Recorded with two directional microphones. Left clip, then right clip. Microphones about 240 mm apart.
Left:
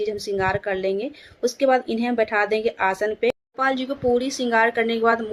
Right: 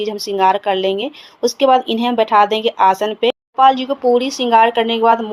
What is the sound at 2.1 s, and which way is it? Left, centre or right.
Speech, right.